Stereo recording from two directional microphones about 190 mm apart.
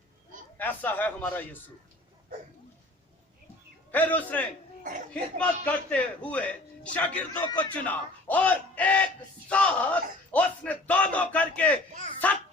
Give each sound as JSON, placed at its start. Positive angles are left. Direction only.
{"t": 0.6, "sound": "a man's voice", "side_deg": 10}
{"t": 3.9, "sound": "a man's voice", "side_deg": 10}
{"t": 4.8, "sound": "speech", "side_deg": -45}
{"t": 5.4, "sound": "a man's voice", "side_deg": 5}